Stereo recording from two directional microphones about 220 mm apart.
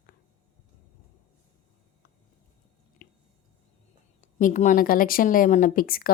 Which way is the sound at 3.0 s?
40° left (ahead or behind).